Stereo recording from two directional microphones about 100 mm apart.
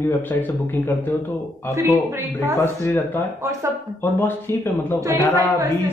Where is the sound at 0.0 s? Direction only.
20° left (ahead or behind).